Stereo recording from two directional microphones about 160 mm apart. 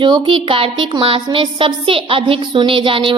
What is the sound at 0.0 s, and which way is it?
A child's voice, 30° right (ahead or behind).